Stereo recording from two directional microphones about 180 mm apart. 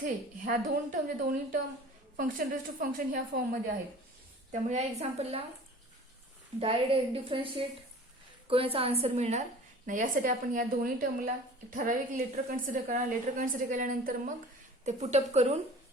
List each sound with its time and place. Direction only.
0.0 s a woman's voice: 50° right (ahead or behind)
4.7 s a woman's voice: 35° right (ahead or behind)
6.6 s a woman's voice: 30° right (ahead or behind)